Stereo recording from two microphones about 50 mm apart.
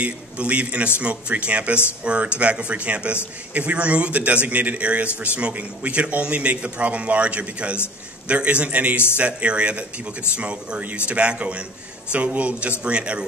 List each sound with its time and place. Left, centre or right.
0.0 s a man's voice: right